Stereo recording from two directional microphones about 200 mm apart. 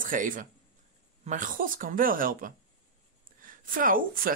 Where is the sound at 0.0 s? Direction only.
40° right (ahead or behind).